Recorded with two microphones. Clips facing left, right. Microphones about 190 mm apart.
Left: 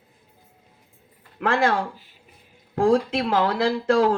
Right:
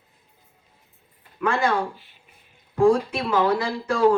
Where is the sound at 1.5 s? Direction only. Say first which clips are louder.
Left 2 dB; 90° left.